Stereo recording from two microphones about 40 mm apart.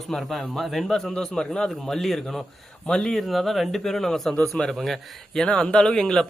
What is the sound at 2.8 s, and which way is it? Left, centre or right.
Speech, centre.